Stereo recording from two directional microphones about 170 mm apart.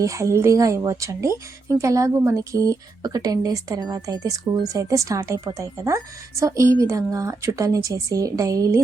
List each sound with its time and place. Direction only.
0.0 s speech: 15° right (ahead or behind)